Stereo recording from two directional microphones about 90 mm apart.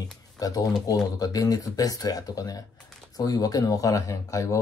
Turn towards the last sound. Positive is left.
turn(degrees=40)  # may be behind; listen again after turning